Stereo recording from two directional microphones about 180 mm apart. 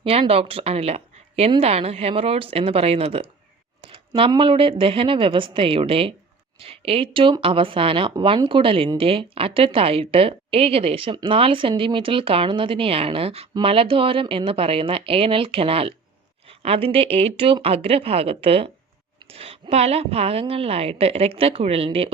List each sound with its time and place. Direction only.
0.0 s speech: 35° right (ahead or behind)